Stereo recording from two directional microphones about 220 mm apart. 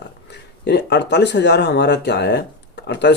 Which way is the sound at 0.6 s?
50° left (ahead or behind).